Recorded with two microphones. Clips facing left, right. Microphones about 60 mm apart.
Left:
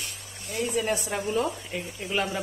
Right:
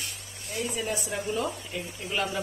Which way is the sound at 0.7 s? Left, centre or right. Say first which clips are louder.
Left 6 dB; left.